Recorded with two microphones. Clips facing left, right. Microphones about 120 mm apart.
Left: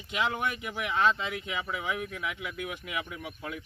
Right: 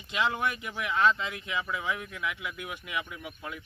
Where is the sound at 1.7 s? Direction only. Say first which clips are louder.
Even; 25° left (ahead or behind).